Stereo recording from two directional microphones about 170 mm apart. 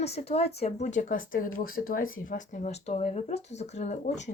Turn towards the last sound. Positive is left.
turn(degrees=40)  # may be behind; listen again after turning